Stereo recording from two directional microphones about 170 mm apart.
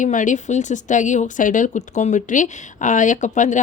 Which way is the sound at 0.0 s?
50° left (ahead or behind).